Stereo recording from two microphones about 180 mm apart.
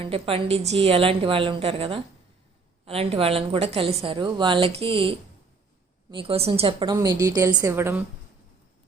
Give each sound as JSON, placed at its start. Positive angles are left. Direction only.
{"t": 0.0, "sound": "a woman's voice", "side_deg": -30}